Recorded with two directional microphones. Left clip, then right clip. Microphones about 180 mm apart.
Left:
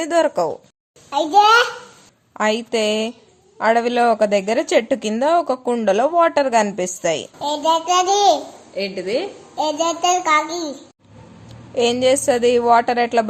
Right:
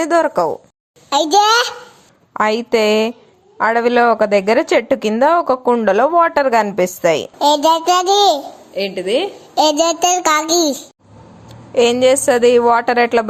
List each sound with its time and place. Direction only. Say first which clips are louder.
0.0 s a woman's voice: right 3 dB; 15° right (ahead or behind)
1.1 s a child's voice: right 1 dB; 35° right (ahead or behind)
2.3 s a woman's voice: right 4 dB; 15° right (ahead or behind)
7.3 s a child's voice: right 6 dB; 50° right (ahead or behind)
8.7 s a woman's voice: right 5 dB; 20° right (ahead or behind)
9.6 s a child's voice: right 6 dB; 55° right (ahead or behind)
11.4 s a woman's voice: right 5 dB; 15° right (ahead or behind)